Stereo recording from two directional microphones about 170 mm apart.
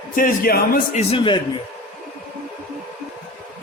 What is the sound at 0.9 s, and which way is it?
Speech, 35° left (ahead or behind).